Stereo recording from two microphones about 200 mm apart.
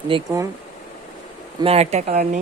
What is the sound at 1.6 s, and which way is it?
Speech, 30° right (ahead or behind).